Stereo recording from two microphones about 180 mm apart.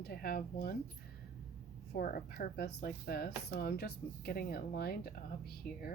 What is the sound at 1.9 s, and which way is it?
Speech, 55° left (ahead or behind).